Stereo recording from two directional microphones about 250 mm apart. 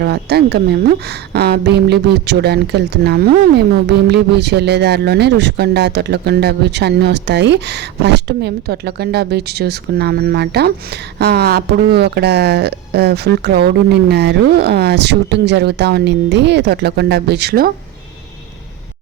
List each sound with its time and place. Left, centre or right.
0.0 s a woman's voice: right